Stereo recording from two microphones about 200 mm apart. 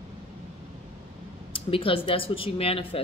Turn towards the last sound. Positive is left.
turn(degrees=30)  # may be behind; listen again after turning